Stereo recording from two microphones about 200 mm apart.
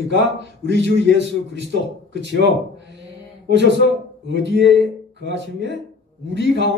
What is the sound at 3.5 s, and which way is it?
A man's voice, 60° right (ahead or behind).